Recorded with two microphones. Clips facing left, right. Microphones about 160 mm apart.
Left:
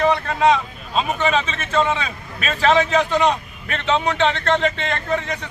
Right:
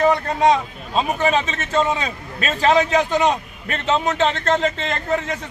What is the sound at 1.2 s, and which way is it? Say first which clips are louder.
A man's voice: right 1 dB; 40° right (ahead or behind).